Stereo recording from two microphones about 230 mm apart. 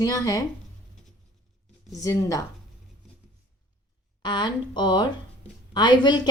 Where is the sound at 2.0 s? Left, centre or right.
Centre.